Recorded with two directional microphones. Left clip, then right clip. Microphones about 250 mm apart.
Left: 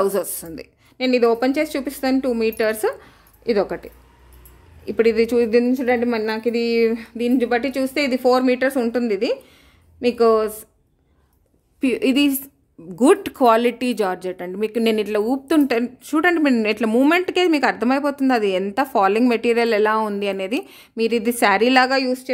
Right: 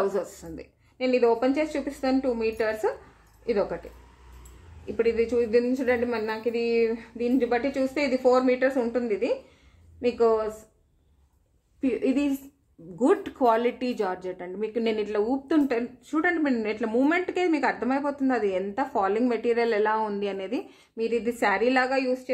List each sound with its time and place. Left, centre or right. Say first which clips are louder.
0.0 s a woman's voice: left 7 dB; left
4.8 s a woman's voice: left 7 dB; left
11.8 s speech: left 7 dB; left